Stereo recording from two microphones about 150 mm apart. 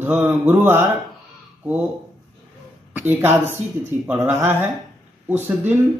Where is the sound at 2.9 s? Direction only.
10° right (ahead or behind).